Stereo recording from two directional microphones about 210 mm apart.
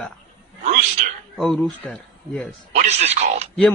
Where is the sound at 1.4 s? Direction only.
Centre (ahead or behind).